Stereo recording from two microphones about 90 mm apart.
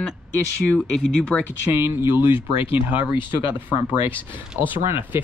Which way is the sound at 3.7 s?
65° left (ahead or behind).